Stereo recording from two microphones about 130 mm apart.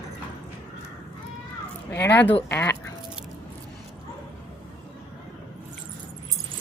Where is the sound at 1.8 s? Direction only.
20° left (ahead or behind).